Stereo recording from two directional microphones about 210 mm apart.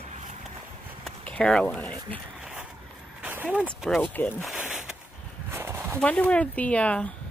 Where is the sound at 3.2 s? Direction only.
5° right (ahead or behind).